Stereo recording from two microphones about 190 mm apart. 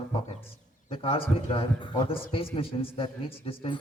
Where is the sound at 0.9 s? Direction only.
30° left (ahead or behind).